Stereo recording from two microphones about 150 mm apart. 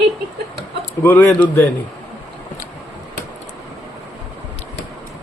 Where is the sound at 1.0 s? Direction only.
15° left (ahead or behind).